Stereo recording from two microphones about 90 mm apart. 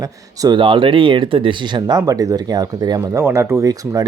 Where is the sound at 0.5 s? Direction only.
70° right (ahead or behind).